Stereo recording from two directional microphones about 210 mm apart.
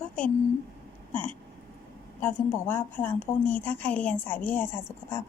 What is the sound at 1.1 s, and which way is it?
Hiccup, 25° right (ahead or behind).